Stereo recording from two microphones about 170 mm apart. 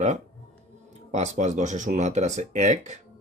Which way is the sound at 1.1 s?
45° right (ahead or behind).